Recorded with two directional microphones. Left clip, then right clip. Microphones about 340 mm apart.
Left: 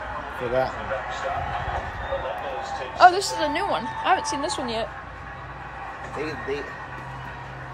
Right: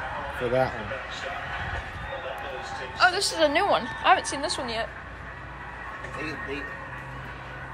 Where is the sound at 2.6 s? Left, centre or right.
Left.